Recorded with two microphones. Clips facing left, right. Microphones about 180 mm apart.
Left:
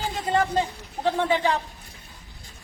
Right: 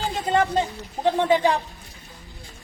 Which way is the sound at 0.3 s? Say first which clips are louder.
Right 2 dB; 25° right (ahead or behind).